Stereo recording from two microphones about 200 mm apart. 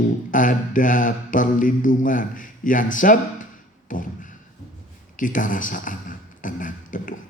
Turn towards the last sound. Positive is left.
turn(degrees=40)  # may be behind; listen again after turning